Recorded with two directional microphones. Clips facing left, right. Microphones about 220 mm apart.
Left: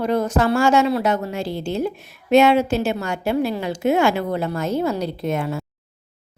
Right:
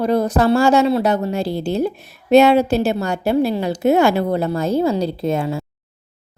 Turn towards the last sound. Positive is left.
turn(degrees=-30)  # may be behind; listen again after turning